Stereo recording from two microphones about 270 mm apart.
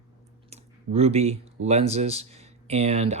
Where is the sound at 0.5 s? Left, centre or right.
Right.